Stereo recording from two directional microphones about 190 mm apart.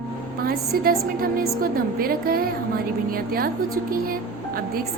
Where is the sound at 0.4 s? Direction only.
50° right (ahead or behind).